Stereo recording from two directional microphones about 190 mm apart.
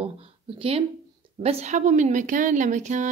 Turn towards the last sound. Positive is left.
turn(degrees=-40)  # may be behind; listen again after turning